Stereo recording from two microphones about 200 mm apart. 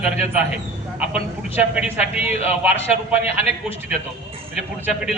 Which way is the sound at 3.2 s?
30° left (ahead or behind).